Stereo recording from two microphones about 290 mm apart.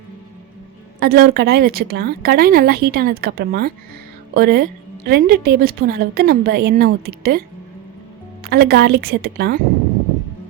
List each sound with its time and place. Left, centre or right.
0.9 s a woman's voice: right
8.4 s a woman's voice: right